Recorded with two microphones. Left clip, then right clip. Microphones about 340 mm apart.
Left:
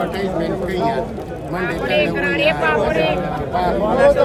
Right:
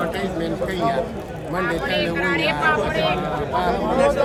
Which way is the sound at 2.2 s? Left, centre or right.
Centre.